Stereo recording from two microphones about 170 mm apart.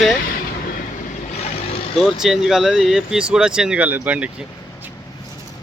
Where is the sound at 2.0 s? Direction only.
Centre (ahead or behind).